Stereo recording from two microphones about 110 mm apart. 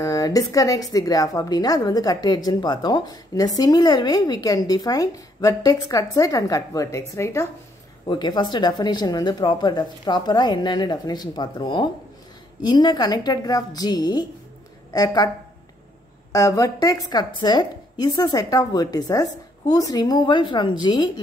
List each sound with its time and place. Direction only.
0.0 s a woman's voice: 35° left (ahead or behind)
8.1 s a woman's voice: 45° left (ahead or behind)